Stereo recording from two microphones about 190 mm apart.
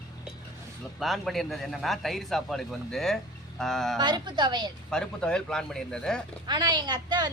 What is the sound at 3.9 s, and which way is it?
Speech, 25° right (ahead or behind).